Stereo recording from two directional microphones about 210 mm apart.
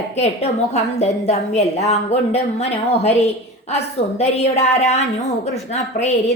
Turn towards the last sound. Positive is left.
turn(degrees=30)  # may be behind; listen again after turning